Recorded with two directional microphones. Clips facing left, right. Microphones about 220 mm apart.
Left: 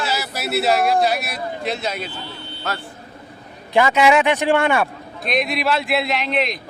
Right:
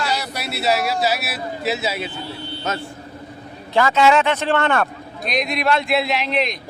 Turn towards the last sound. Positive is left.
turn(degrees=0)  # may be behind; listen again after turning